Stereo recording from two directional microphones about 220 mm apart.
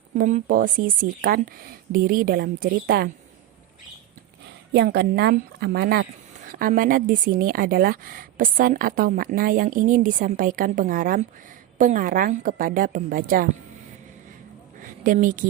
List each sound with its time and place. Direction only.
0.2 s a woman's voice: 35° right (ahead or behind)
4.4 s a woman's voice: 50° right (ahead or behind)
15.0 s a woman's voice: 35° right (ahead or behind)